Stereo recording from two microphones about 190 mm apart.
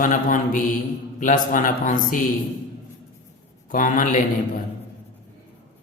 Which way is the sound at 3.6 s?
45° left (ahead or behind).